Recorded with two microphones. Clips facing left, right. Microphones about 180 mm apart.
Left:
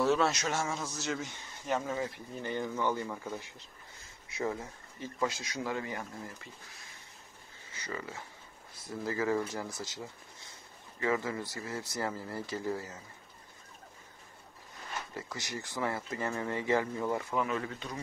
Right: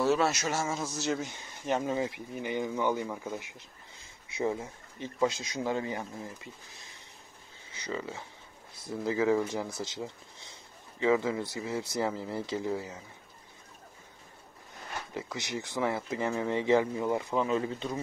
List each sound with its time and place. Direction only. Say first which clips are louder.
0.0 s speech: right 1 dB; 5° right (ahead or behind)
1.7 s speech: right 3 dB; 20° right (ahead or behind)
15.1 s speech: right 8 dB; 15° right (ahead or behind)